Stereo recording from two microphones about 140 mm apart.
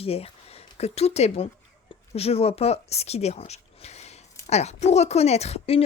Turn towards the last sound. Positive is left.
turn(degrees=45)  # may be behind; listen again after turning